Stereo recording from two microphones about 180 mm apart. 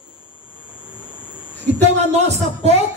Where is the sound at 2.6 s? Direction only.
35° right (ahead or behind).